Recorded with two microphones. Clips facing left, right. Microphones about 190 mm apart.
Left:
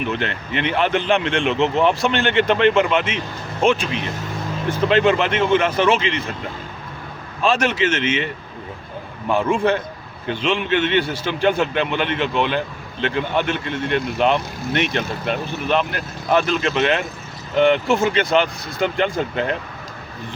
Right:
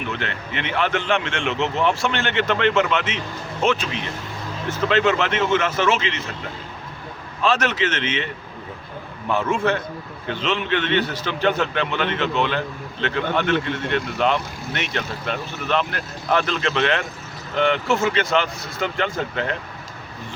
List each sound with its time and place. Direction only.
0.1 s speech: 20° left (ahead or behind)
4.9 s speech: 15° left (ahead or behind)
7.4 s speech: 10° left (ahead or behind)
9.3 s speech: 15° left (ahead or behind)